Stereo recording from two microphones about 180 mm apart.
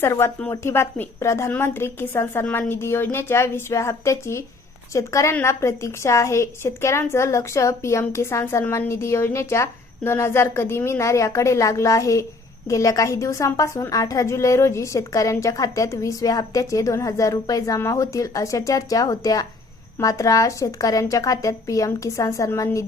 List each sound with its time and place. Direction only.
0.0 s a woman's voice: 15° left (ahead or behind)